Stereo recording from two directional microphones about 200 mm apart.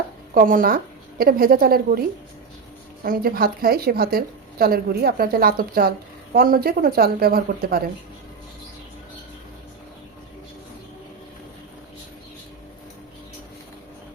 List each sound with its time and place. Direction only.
0.3 s a woman's voice: 45° right (ahead or behind)